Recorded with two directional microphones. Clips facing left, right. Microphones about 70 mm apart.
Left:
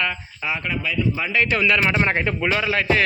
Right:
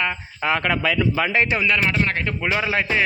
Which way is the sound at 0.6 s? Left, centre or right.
Right.